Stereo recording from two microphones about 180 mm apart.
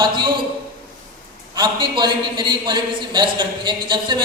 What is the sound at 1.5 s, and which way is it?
A man's voice, 25° right (ahead or behind).